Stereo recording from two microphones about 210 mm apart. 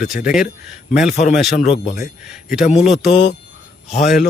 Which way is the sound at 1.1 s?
35° left (ahead or behind).